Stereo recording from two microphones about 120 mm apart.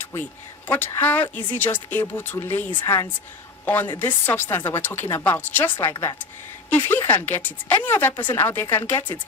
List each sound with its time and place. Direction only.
0.0 s a sound: 15° left (ahead or behind)
0.7 s a woman's voice: 15° left (ahead or behind)
3.7 s a woman's voice: 15° left (ahead or behind)
5.9 s a woman's voice: 25° left (ahead or behind)
6.7 s a woman's voice: 15° left (ahead or behind)